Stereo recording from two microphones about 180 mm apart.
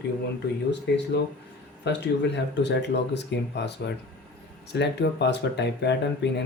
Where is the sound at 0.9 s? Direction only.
65° left (ahead or behind).